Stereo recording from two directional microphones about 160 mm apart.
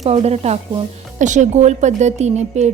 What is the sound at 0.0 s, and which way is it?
A woman's voice, 40° right (ahead or behind).